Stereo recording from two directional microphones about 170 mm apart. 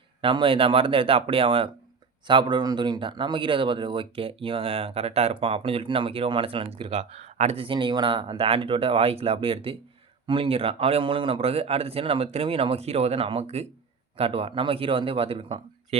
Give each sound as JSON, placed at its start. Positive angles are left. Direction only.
{"t": 0.2, "sound": "speech", "side_deg": -30}